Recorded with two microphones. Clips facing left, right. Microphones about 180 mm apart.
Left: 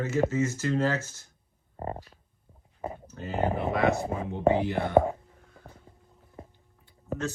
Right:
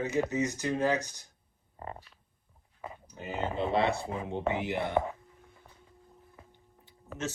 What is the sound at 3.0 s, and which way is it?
Speech, 15° right (ahead or behind).